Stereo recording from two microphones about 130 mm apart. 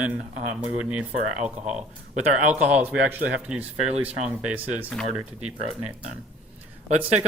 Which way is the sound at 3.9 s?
55° right (ahead or behind).